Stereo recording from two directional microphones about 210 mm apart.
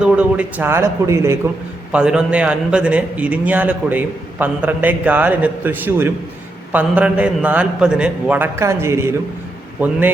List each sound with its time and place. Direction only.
0.0 s a man's voice: 5° right (ahead or behind)